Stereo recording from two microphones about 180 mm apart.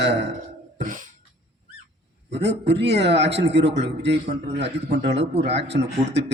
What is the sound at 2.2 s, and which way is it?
A man's voice, 70° right (ahead or behind).